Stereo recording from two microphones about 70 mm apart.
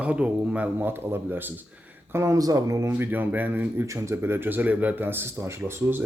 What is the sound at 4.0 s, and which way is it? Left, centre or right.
Speech, right.